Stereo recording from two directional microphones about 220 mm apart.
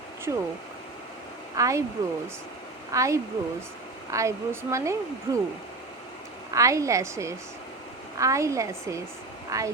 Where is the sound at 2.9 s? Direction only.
15° right (ahead or behind).